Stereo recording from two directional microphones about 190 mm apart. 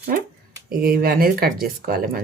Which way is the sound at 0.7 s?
50° right (ahead or behind).